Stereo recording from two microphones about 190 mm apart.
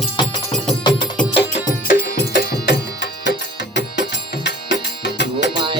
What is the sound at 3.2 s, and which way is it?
Music, 65° left (ahead or behind).